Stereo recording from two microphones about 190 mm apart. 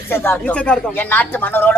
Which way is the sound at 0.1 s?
10° left (ahead or behind).